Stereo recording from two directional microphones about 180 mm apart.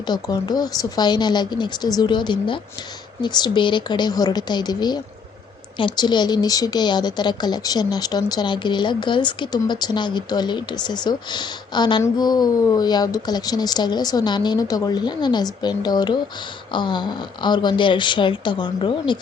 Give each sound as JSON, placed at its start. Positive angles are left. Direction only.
{"t": 0.1, "sound": "speech", "side_deg": 25}